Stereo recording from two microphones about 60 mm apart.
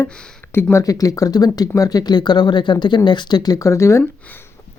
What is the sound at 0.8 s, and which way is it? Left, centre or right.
Speech, left.